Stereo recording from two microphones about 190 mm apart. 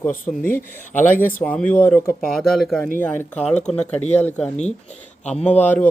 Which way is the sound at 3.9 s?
35° left (ahead or behind).